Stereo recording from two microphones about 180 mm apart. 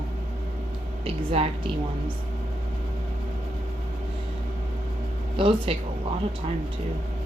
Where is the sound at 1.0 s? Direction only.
35° right (ahead or behind).